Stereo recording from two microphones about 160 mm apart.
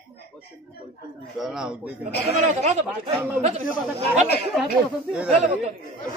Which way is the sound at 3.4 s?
45° right (ahead or behind).